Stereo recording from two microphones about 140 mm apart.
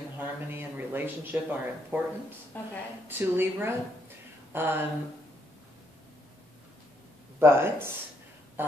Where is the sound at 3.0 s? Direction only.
15° right (ahead or behind).